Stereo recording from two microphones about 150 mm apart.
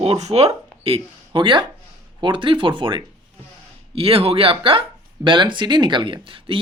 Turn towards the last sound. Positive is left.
turn(degrees=-35)  # may be behind; listen again after turning